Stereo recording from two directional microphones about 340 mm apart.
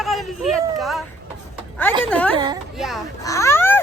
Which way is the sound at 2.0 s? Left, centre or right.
Centre.